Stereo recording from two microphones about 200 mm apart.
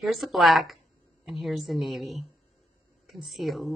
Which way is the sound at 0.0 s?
Centre (ahead or behind).